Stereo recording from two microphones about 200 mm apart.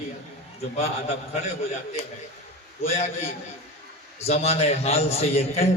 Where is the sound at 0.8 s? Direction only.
35° left (ahead or behind).